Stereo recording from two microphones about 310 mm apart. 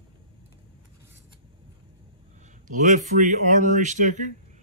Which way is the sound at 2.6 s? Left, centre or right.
Right.